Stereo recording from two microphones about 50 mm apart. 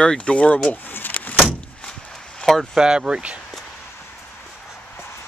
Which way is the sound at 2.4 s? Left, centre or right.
Centre.